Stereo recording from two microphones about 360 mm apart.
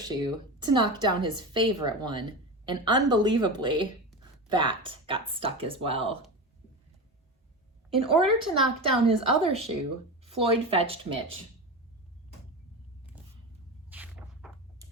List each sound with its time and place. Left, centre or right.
0.1 s a woman's voice: centre
7.9 s a woman's voice: centre
13.9 s a sound: centre